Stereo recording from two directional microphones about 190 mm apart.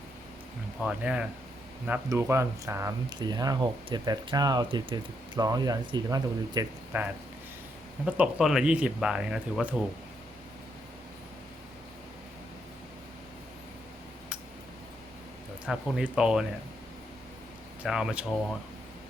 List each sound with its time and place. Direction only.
0.8 s speech: 5° right (ahead or behind)
15.6 s speech: 5° right (ahead or behind)
17.8 s speech: 5° right (ahead or behind)